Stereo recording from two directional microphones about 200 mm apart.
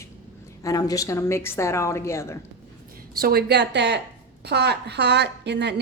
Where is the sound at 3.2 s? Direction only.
50° right (ahead or behind).